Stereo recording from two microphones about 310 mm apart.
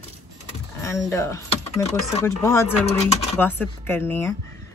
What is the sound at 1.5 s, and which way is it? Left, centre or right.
Speech, centre.